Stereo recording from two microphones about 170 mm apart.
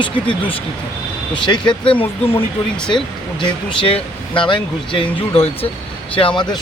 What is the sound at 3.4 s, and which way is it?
Speech, 30° left (ahead or behind).